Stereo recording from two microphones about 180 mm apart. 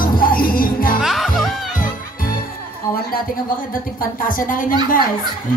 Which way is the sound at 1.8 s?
50° left (ahead or behind).